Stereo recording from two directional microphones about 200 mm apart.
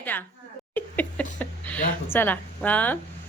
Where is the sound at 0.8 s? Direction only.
10° left (ahead or behind).